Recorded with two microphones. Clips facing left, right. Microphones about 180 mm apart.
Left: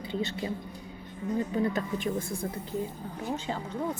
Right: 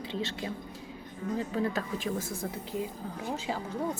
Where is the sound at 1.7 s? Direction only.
5° right (ahead or behind).